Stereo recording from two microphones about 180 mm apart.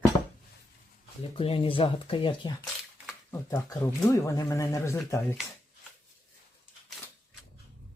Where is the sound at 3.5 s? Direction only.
20° left (ahead or behind).